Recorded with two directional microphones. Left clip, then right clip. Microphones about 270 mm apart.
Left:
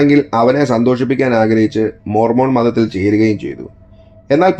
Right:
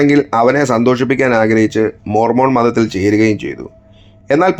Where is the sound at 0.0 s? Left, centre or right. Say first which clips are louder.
Even; right.